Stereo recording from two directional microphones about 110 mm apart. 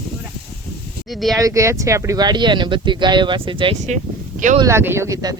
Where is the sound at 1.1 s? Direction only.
Centre (ahead or behind).